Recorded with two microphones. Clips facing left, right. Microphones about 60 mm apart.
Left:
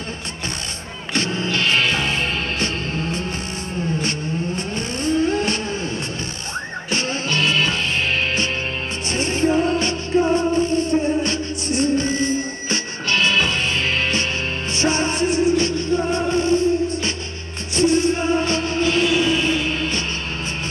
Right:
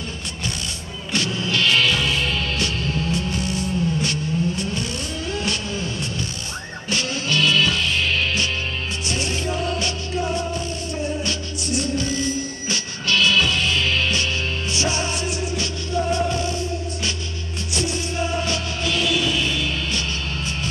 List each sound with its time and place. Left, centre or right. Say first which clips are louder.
1.1 s music: left 1 dB; left
6.9 s music: even; left
9.1 s music: left 8 dB; left